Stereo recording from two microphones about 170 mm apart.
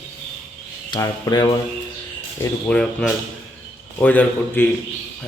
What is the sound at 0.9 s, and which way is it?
Speech, 20° left (ahead or behind).